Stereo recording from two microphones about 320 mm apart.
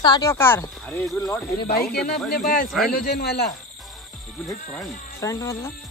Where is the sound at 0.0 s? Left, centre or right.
Centre.